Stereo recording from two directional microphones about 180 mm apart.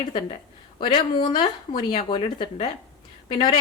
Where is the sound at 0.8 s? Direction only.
25° left (ahead or behind).